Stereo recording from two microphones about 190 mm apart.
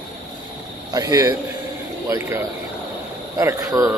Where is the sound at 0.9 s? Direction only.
20° right (ahead or behind).